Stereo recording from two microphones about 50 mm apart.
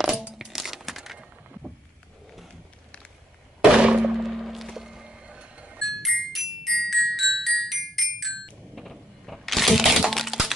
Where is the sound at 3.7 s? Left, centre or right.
Centre.